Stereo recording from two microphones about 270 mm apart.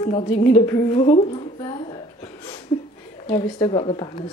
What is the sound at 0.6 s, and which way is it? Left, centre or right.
A woman's voice, centre.